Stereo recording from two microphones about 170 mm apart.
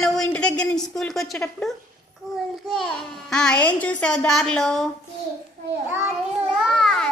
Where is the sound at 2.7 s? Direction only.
5° left (ahead or behind).